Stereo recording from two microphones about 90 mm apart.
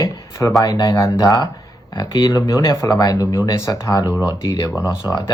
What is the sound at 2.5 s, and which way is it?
Speech, 35° left (ahead or behind).